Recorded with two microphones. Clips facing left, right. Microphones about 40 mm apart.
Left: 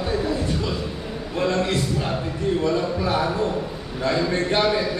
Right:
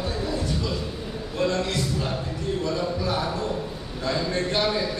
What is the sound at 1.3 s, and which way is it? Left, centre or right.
A man's voice, left.